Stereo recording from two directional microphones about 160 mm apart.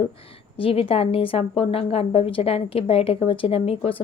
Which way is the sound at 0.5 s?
35° left (ahead or behind).